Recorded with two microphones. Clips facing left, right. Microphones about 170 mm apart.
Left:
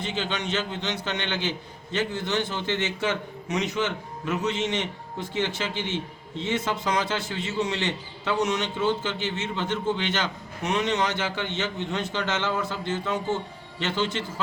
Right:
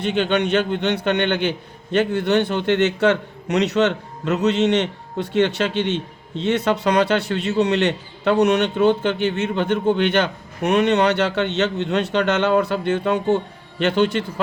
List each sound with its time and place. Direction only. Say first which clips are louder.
0.0 s a man's voice: right 10 dB; 60° right (ahead or behind)